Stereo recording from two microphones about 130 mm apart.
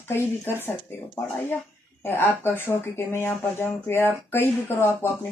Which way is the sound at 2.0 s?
15° left (ahead or behind).